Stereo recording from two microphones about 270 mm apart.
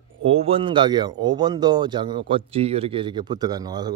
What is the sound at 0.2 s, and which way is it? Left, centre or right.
A man's voice, right.